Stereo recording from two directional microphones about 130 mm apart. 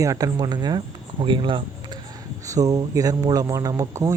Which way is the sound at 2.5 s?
25° right (ahead or behind).